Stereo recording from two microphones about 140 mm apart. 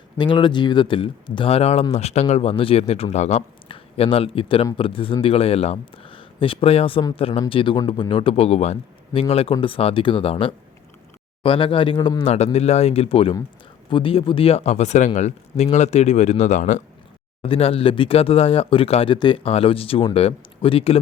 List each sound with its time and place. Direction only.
0.2 s speech: 35° left (ahead or behind)
12.3 s speech: 50° left (ahead or behind)
17.4 s speech: 40° left (ahead or behind)